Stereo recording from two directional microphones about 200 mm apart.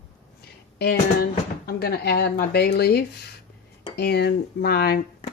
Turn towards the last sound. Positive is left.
turn(degrees=50)  # may be behind; listen again after turning